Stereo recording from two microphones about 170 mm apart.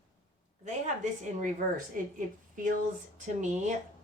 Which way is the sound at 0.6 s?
45° right (ahead or behind).